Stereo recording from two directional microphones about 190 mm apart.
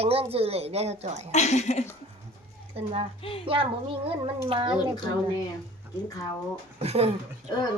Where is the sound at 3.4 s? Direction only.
30° right (ahead or behind).